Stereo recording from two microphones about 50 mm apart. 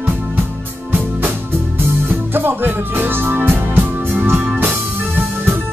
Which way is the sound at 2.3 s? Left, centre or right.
Right.